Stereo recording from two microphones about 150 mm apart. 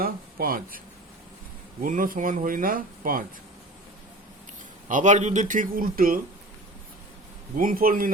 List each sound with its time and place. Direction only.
0.0 s speech: 75° right (ahead or behind)
1.8 s speech: 65° right (ahead or behind)
4.9 s speech: 55° right (ahead or behind)
7.5 s a man's voice: 65° right (ahead or behind)